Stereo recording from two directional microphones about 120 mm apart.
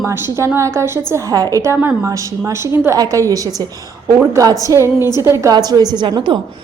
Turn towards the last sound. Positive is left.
turn(degrees=-40)  # may be behind; listen again after turning